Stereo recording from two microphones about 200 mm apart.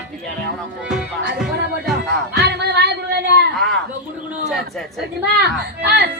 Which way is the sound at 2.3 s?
55° right (ahead or behind).